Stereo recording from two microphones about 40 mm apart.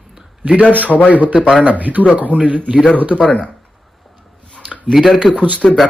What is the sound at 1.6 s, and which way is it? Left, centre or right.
Speech, right.